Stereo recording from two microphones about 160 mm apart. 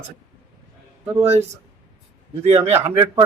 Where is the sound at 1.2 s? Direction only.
20° right (ahead or behind).